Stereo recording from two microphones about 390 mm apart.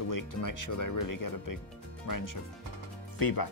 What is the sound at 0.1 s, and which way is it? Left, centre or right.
Speech, left.